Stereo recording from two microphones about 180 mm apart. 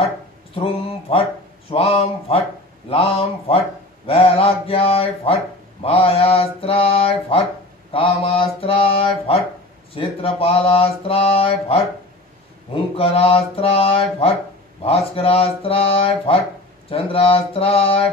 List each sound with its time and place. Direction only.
0.6 s speech: 30° left (ahead or behind)
12.9 s speech: 30° left (ahead or behind)